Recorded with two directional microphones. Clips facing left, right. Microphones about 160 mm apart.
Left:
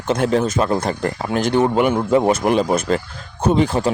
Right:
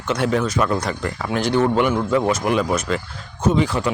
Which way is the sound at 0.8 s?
45° left (ahead or behind).